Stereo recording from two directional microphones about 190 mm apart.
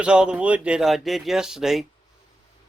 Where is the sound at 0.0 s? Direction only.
5° right (ahead or behind).